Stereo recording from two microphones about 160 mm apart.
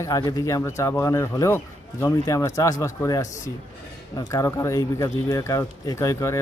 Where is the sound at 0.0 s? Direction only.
20° left (ahead or behind).